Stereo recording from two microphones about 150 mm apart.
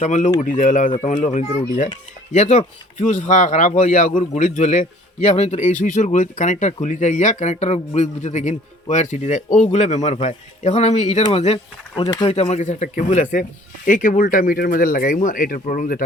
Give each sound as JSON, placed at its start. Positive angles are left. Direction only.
{"t": 0.0, "sound": "a man's voice", "side_deg": 55}
{"t": 12.0, "sound": "speech", "side_deg": 30}
{"t": 12.3, "sound": "a man's voice", "side_deg": 45}
{"t": 13.8, "sound": "speech", "side_deg": 65}